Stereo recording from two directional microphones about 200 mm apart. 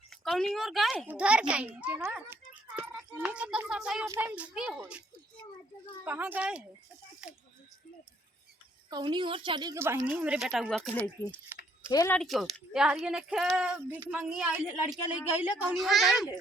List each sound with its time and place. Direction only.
0.1 s a child's voice: centre (ahead or behind)
6.1 s a woman's voice: 10° right (ahead or behind)
8.9 s a woman's voice: 20° right (ahead or behind); by 10.9 s centre (ahead or behind)
11.0 s speech: 10° left (ahead or behind)
12.1 s a woman's voice: centre (ahead or behind)